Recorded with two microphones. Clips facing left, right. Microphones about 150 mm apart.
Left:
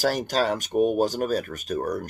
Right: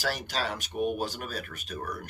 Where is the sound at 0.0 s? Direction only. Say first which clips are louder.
Left 9 dB; 45° left (ahead or behind).